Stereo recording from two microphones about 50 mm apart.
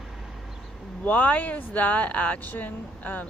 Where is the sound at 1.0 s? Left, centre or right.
Left.